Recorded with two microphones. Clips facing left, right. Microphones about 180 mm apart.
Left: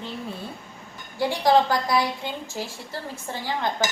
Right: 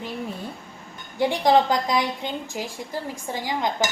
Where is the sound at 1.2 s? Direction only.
20° right (ahead or behind).